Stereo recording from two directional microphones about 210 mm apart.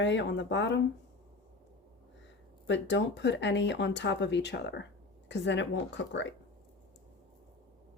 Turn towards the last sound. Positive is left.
turn(degrees=60)  # may be behind; listen again after turning